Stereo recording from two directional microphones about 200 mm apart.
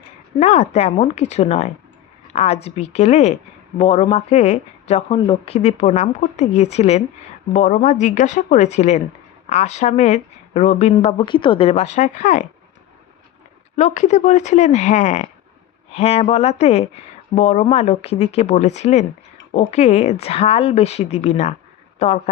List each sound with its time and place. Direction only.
0.3 s speech: 35° left (ahead or behind)
13.7 s speech: 35° left (ahead or behind)